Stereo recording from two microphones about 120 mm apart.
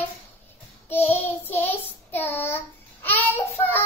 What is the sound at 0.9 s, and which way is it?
Child singing, 15° left (ahead or behind).